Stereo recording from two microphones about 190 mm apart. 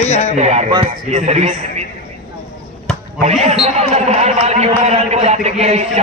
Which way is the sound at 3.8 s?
35° right (ahead or behind).